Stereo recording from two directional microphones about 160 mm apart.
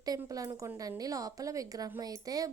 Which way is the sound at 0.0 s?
20° right (ahead or behind).